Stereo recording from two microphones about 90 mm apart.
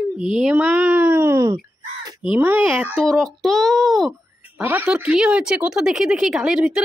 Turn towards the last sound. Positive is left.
turn(degrees=-5)  # may be behind; listen again after turning